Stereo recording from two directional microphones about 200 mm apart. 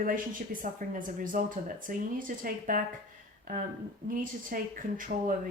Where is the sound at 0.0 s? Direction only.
45° right (ahead or behind).